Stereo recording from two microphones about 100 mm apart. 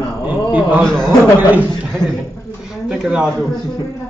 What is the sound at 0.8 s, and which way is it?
Speech, 5° left (ahead or behind).